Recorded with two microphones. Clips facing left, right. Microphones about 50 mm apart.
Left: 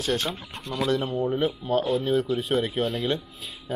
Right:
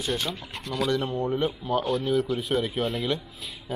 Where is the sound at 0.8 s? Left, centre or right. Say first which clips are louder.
Left 2 dB; centre.